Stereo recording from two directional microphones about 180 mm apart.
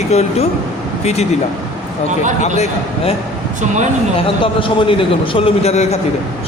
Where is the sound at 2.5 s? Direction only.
35° left (ahead or behind).